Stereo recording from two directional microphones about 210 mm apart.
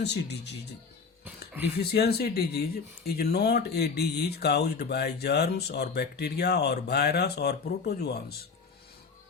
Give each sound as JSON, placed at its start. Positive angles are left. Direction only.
{"t": 0.0, "sound": "speech", "side_deg": 55}
{"t": 1.8, "sound": "speech", "side_deg": 50}